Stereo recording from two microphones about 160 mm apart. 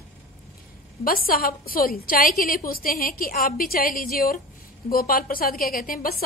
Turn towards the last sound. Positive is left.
turn(degrees=65)  # may be behind; listen again after turning